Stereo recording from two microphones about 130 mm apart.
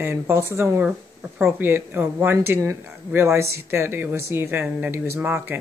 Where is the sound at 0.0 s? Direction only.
15° right (ahead or behind).